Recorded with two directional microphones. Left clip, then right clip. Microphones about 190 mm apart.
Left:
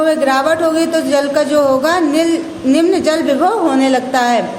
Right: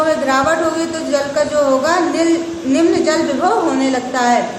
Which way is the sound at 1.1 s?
40° left (ahead or behind).